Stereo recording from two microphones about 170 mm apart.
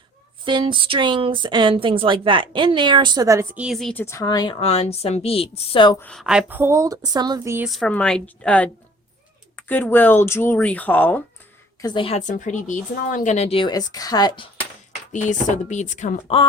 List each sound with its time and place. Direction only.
0.4 s speech: 30° right (ahead or behind)
3.6 s a woman's voice: centre (ahead or behind)
4.0 s a woman's voice: 20° left (ahead or behind)
6.0 s speech: 5° left (ahead or behind); by 7.7 s 15° right (ahead or behind)
7.7 s speech: 5° left (ahead or behind)
11.8 s a woman's voice: 25° left (ahead or behind)
12.2 s a woman's voice: 45° left (ahead or behind); by 14.5 s 25° left (ahead or behind)
15.1 s speech: 45° left (ahead or behind)